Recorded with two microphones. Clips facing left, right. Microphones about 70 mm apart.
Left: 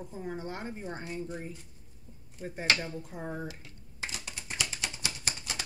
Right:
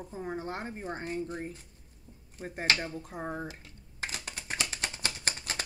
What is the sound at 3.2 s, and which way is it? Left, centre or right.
Speech, right.